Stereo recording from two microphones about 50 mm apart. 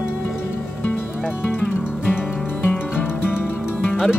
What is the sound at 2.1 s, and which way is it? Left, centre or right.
Music, left.